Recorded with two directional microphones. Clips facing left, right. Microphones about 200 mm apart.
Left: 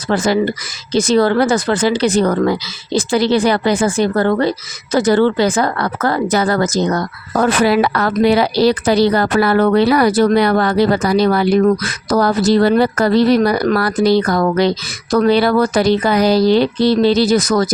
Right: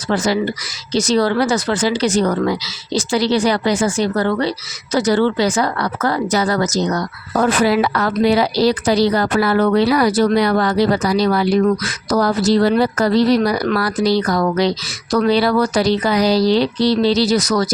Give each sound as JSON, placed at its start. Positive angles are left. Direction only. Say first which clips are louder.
{"t": 0.1, "sound": "speech", "louder": "left 3 dB", "side_deg": 50}